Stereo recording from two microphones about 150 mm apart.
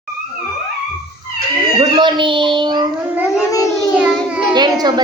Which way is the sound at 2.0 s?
30° right (ahead or behind).